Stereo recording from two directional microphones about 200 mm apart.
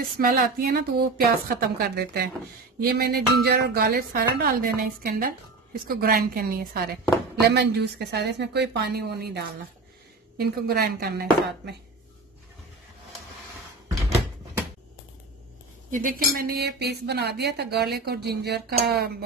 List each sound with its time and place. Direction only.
0.2 s a woman's voice: 45° right (ahead or behind)
15.9 s a woman's voice: 45° right (ahead or behind)